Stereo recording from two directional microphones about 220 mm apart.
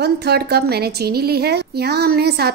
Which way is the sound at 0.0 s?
45° right (ahead or behind).